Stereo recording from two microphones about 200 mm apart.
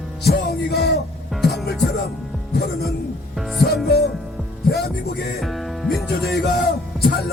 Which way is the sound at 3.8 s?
55° left (ahead or behind).